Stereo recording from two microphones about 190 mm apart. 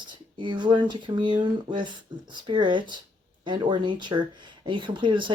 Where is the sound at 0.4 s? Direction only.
25° right (ahead or behind).